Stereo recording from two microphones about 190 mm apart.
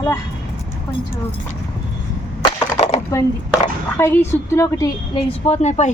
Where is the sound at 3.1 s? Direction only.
20° left (ahead or behind).